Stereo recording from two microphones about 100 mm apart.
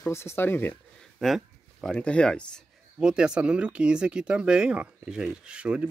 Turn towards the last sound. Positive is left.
turn(degrees=-10)  # may be behind; listen again after turning